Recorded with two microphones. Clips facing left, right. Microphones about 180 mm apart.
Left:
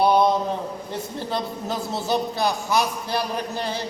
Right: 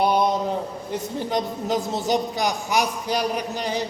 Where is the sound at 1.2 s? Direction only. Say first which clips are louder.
Right 2 dB; 15° right (ahead or behind).